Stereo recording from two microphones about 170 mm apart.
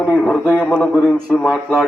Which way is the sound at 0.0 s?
10° left (ahead or behind).